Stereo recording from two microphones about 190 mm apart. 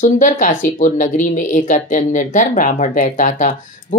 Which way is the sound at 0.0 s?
45° left (ahead or behind).